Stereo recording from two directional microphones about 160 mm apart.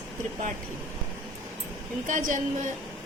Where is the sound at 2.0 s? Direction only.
55° right (ahead or behind).